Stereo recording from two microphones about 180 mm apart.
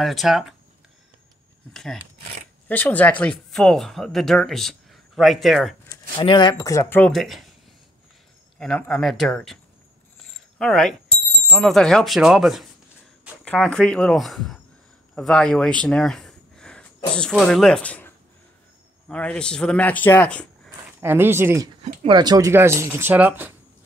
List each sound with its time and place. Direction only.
0.0 s speech: centre (ahead or behind)
1.7 s speech: centre (ahead or behind)
5.9 s speech: 25° left (ahead or behind); by 7.5 s centre (ahead or behind)
8.5 s speech: 5° left (ahead or behind)
10.6 s speech: 5° left (ahead or behind)
21.0 s speech: 10° right (ahead or behind)
22.0 s speech: 25° right (ahead or behind)